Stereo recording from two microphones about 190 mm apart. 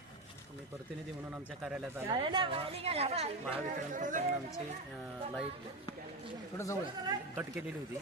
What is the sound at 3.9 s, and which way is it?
Speech, 45° right (ahead or behind).